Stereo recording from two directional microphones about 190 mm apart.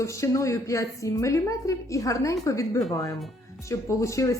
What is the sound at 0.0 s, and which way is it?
A woman's voice, 15° left (ahead or behind).